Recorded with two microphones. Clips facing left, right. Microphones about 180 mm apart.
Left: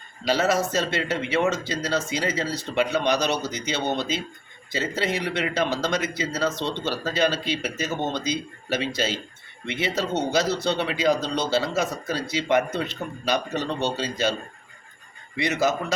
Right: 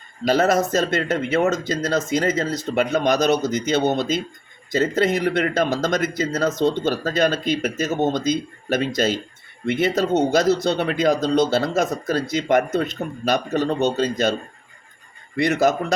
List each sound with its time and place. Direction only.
0.3 s speech: 50° right (ahead or behind)
15.4 s speech: 50° right (ahead or behind)